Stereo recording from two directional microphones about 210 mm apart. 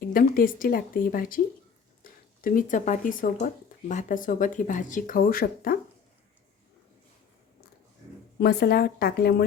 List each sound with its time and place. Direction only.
0.1 s speech: 40° left (ahead or behind)
2.0 s a sound: 40° left (ahead or behind)
2.4 s speech: 40° left (ahead or behind)
8.4 s a woman's voice: 50° left (ahead or behind)